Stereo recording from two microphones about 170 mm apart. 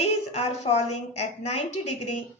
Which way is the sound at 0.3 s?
40° left (ahead or behind).